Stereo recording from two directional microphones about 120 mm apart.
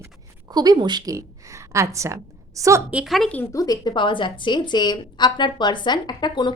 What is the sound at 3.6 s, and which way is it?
A woman's voice, 35° left (ahead or behind).